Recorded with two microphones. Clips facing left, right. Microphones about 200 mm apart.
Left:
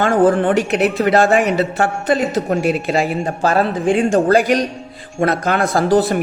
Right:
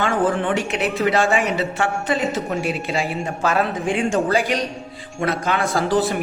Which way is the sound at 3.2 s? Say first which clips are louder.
Left 4 dB; 35° left (ahead or behind).